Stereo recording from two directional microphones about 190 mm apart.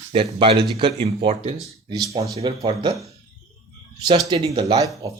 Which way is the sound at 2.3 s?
20° right (ahead or behind).